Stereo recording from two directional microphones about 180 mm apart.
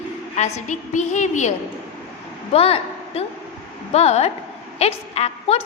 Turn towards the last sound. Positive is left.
turn(degrees=35)  # may be behind; listen again after turning